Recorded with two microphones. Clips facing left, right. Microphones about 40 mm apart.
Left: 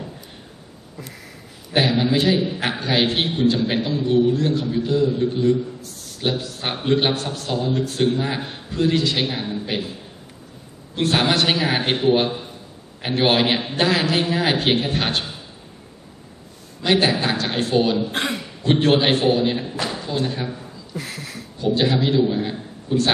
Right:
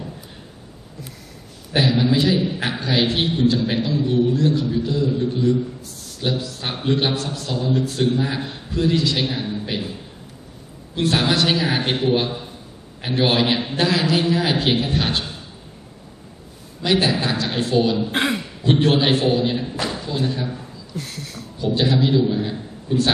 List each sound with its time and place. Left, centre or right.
1.8 s a man's voice: centre
11.1 s a man's voice: centre
16.8 s a man's voice: left
18.1 s speech: centre
18.7 s a man's voice: centre
19.8 s a sound: centre
20.2 s a man's voice: centre